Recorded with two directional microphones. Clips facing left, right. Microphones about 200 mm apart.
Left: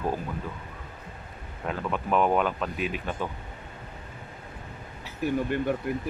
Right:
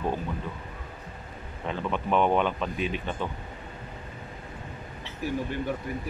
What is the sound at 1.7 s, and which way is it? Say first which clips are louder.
A man's voice: even; 5° left (ahead or behind).